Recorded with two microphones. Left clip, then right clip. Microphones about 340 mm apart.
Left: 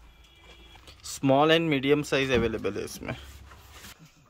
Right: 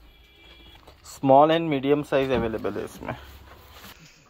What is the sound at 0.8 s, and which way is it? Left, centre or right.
Speech, centre.